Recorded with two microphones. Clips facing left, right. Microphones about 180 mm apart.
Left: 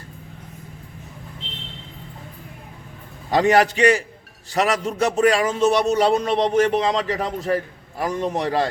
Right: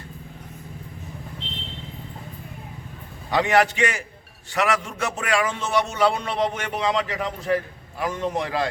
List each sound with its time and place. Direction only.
3.2 s a man's voice: 40° left (ahead or behind)